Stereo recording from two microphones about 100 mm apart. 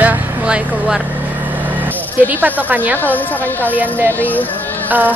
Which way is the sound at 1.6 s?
15° right (ahead or behind).